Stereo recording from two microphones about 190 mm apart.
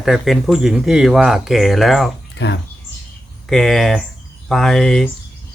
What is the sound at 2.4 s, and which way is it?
Speech, 65° left (ahead or behind).